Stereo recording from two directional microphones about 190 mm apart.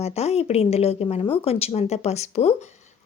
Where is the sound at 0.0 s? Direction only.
35° left (ahead or behind).